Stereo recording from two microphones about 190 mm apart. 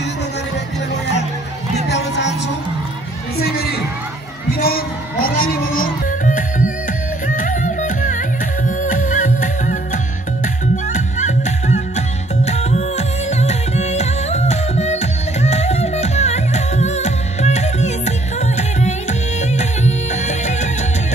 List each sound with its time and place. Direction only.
1.9 s music: 65° left (ahead or behind)
3.3 s crowd: 55° left (ahead or behind)
4.5 s music: 50° left (ahead or behind)